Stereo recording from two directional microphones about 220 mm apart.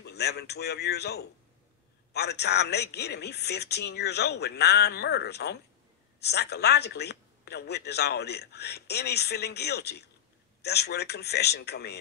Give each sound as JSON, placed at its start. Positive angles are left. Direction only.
{"t": 0.0, "sound": "speech", "side_deg": 50}